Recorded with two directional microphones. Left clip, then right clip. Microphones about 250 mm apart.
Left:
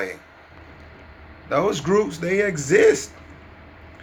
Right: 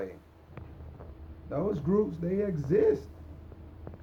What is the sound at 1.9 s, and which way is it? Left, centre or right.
Speech, centre.